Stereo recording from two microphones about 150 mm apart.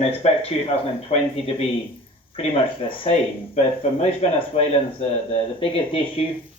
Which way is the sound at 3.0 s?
45° left (ahead or behind).